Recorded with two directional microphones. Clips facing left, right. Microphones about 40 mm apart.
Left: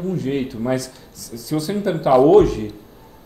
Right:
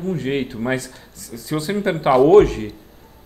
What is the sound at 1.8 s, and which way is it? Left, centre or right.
Speech, right.